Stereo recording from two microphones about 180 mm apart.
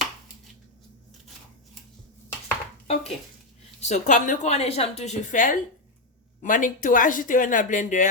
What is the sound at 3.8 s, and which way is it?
A woman's voice, 40° left (ahead or behind).